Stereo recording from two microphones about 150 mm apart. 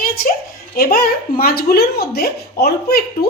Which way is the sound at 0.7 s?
85° left.